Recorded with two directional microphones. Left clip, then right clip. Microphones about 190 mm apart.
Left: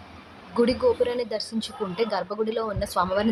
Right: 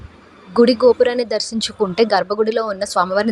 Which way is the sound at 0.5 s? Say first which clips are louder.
Right 9 dB; 40° right (ahead or behind).